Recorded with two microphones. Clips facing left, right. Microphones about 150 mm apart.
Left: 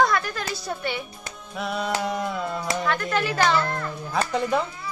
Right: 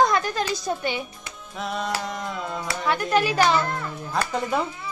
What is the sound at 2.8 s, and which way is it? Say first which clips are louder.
Speech: right 5 dB; 15° right (ahead or behind).